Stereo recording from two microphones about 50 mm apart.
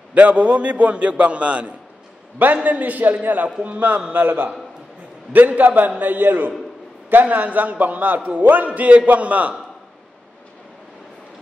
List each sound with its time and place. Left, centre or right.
0.1 s a man's voice: right
5.6 s a man's voice: right